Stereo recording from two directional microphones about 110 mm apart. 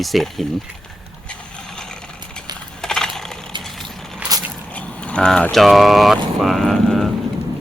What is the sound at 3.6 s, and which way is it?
Vehicle, 5° left (ahead or behind).